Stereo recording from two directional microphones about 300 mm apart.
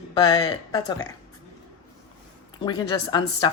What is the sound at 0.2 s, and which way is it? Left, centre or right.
Speech, centre.